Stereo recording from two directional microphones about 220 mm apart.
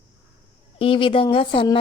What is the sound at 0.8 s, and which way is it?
A woman's voice, 25° left (ahead or behind).